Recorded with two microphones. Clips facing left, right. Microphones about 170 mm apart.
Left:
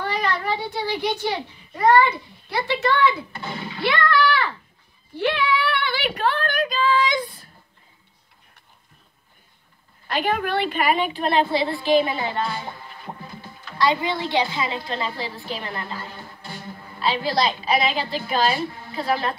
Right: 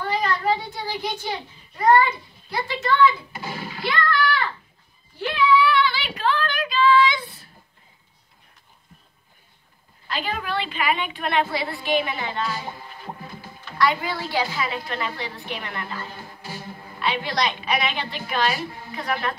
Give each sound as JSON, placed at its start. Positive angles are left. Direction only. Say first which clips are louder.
{"t": 0.0, "sound": "a child's voice", "louder": "right 1 dB", "side_deg": 70}
{"t": 3.3, "sound": "splash", "louder": "left 1 dB", "side_deg": -10}
{"t": 3.8, "sound": "splash", "louder": "left 3 dB", "side_deg": 70}
{"t": 5.1, "sound": "child singing", "louder": "right 2 dB", "side_deg": 70}
{"t": 10.0, "sound": "a woman's voice", "louder": "left 5 dB", "side_deg": 55}
{"t": 13.7, "sound": "a woman's voice", "louder": "left 1 dB", "side_deg": 25}
{"t": 17.0, "sound": "a woman's voice", "louder": "left 3 dB", "side_deg": 30}